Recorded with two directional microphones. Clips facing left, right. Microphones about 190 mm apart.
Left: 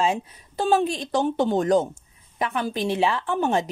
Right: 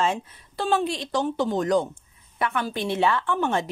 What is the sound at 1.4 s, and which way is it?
Speech, 25° left (ahead or behind).